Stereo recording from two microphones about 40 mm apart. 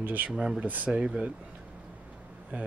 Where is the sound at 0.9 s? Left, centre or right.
Right.